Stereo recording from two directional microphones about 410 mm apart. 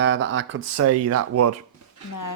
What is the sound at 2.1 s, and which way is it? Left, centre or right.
Speech, left.